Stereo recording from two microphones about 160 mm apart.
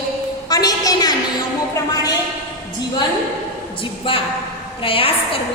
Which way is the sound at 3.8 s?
35° left (ahead or behind).